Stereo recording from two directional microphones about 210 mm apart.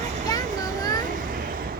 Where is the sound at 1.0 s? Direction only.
40° right (ahead or behind).